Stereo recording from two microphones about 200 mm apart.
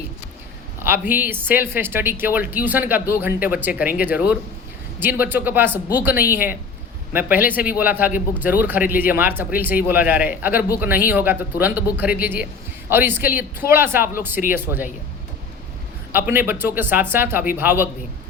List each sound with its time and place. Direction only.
0.8 s speech: 10° right (ahead or behind)
16.1 s speech: 10° right (ahead or behind)